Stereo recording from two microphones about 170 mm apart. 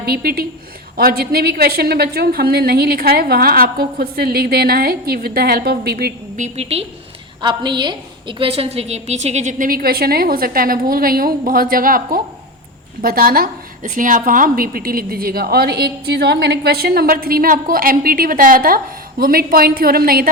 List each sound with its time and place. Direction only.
0.0 s a woman's voice: 65° right (ahead or behind)
6.3 s a woman's voice: 40° right (ahead or behind)
7.4 s a woman's voice: 25° right (ahead or behind); by 20.3 s 60° right (ahead or behind)